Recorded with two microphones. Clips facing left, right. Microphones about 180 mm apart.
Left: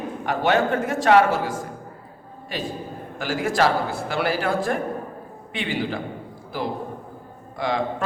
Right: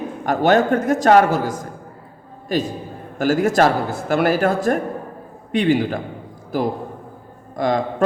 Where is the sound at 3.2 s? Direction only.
45° right (ahead or behind).